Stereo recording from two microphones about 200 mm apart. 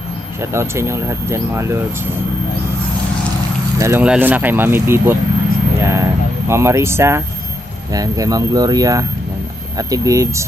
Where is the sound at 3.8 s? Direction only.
10° right (ahead or behind).